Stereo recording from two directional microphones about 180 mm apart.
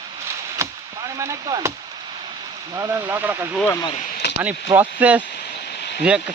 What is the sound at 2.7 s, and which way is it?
Speech, 15° right (ahead or behind).